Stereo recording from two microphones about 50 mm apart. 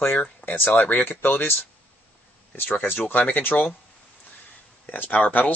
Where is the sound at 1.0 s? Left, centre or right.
Left.